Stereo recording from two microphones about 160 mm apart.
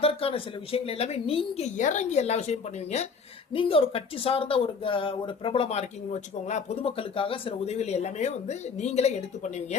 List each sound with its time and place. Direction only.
0.0 s speech: 35° left (ahead or behind)
3.5 s speech: 35° left (ahead or behind)